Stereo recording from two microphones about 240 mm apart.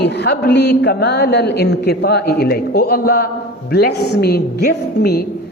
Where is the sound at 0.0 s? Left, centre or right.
Left.